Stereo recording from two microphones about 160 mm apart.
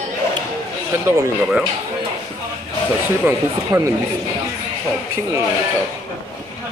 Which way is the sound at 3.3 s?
15° right (ahead or behind).